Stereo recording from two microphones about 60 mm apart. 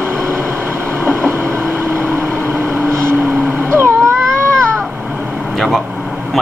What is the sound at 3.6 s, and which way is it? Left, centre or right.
Cat, right.